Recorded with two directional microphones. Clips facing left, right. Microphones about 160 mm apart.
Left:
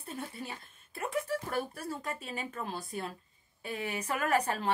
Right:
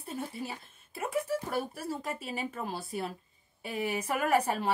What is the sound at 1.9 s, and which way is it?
Speech, 25° right (ahead or behind).